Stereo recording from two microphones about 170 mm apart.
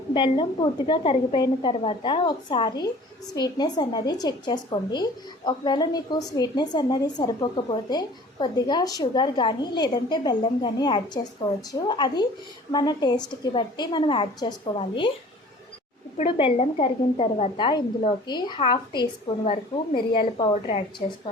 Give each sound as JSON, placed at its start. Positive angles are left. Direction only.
{"t": 0.1, "sound": "a woman's voice", "side_deg": 30}
{"t": 16.1, "sound": "a woman's voice", "side_deg": 40}